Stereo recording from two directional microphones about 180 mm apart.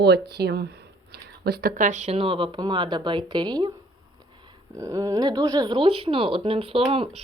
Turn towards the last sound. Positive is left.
turn(degrees=-30)  # may be behind; listen again after turning